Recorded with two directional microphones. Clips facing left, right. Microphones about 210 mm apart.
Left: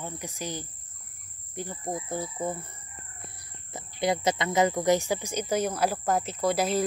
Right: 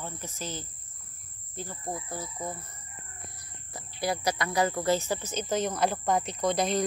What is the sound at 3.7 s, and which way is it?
Speech, 20° left (ahead or behind).